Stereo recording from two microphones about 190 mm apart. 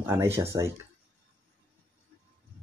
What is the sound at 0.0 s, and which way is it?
Speech, 15° right (ahead or behind).